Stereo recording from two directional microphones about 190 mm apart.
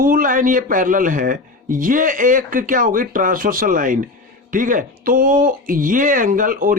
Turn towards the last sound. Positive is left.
turn(degrees=-45)  # may be behind; listen again after turning